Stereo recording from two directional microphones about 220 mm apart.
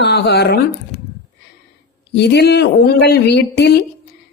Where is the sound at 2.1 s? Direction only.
50° left (ahead or behind).